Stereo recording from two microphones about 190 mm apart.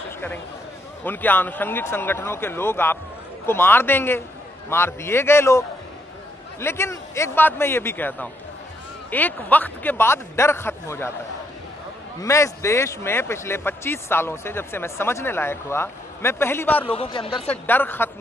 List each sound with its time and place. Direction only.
1.0 s speech: 10° left (ahead or behind)
6.6 s speech: 15° left (ahead or behind)
12.2 s speech: 15° left (ahead or behind)
16.9 s speech: 30° left (ahead or behind)
17.5 s speech: 10° left (ahead or behind)